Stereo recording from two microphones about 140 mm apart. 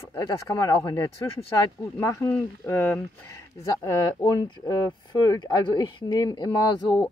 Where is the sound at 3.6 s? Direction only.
25° left (ahead or behind).